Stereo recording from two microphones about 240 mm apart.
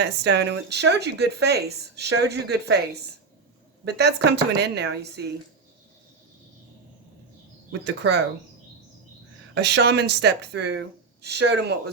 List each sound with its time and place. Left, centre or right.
0.0 s speech: right
7.7 s speech: right
9.6 s speech: right